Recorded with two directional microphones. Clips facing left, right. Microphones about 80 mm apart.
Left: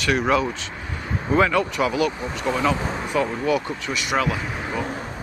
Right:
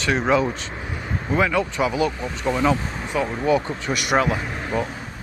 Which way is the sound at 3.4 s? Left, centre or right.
Right.